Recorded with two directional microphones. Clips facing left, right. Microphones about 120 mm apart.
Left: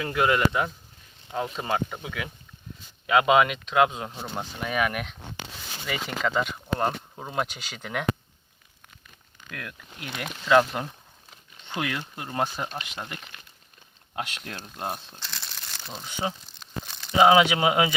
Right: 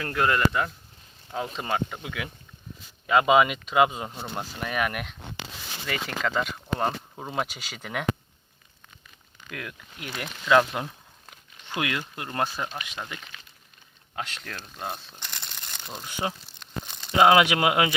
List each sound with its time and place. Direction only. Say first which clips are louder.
0.0 s speech: left 1 dB; 10° left (ahead or behind)
9.5 s speech: right 1 dB; 5° right (ahead or behind)
14.2 s speech: left 1 dB; 10° left (ahead or behind)
15.2 s crumpling: left 1 dB; 15° right (ahead or behind)
16.0 s speech: even; 5° right (ahead or behind)
16.8 s crumpling: even; 20° right (ahead or behind)
17.2 s speech: even; centre (ahead or behind)